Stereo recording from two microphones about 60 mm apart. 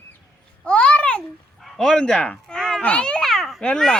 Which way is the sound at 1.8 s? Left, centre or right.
Centre.